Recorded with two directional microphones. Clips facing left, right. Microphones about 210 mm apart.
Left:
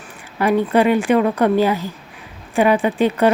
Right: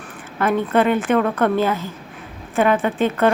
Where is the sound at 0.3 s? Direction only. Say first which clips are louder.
Left 2 dB; 10° left (ahead or behind).